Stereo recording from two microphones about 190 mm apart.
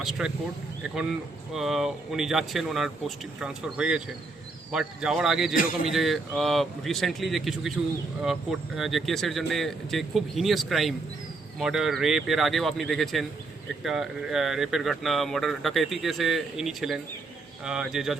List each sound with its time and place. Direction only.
0.0 s speech: 5° right (ahead or behind)
1.5 s speech: centre (ahead or behind)